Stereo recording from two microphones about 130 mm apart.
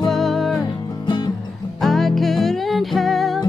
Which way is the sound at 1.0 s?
35° left (ahead or behind).